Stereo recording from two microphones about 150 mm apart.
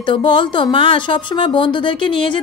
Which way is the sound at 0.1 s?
35° left (ahead or behind).